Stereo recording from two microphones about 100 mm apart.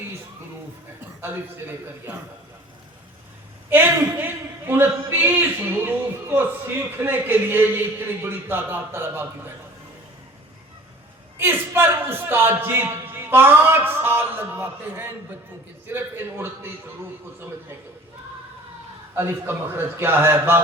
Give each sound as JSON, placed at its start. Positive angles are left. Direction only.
{"t": 1.0, "sound": "a man's voice", "side_deg": -20}
{"t": 3.7, "sound": "a man's voice", "side_deg": -20}
{"t": 11.3, "sound": "a man's voice", "side_deg": -25}
{"t": 19.1, "sound": "a man's voice", "side_deg": -25}